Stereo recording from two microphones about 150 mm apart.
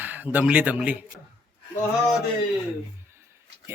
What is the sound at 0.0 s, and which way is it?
A man's voice, 10° right (ahead or behind).